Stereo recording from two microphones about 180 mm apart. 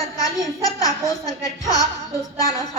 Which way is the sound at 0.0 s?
20° left (ahead or behind).